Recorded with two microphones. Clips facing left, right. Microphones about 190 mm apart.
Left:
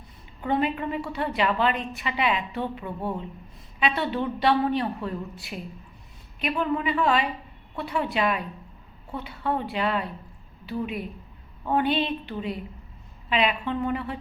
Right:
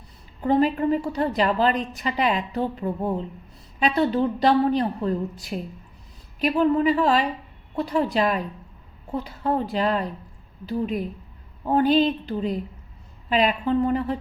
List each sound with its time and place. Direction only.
0.4 s a woman's voice: 35° right (ahead or behind)